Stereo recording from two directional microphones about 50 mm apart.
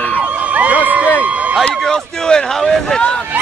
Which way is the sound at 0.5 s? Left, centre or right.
Right.